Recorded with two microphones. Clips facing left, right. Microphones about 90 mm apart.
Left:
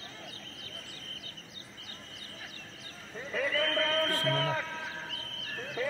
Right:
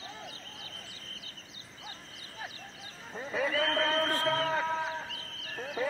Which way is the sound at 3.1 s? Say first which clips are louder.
Right 1 dB; 20° right (ahead or behind).